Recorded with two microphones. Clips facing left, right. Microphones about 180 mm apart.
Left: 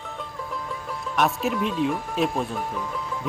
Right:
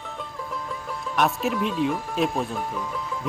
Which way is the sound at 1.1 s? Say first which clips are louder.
Even; centre (ahead or behind).